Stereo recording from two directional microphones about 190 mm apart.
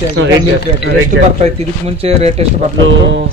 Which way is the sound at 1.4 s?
35° right (ahead or behind).